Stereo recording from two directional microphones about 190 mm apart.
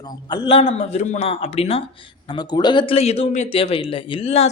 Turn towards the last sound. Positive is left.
turn(degrees=30)  # may be behind; listen again after turning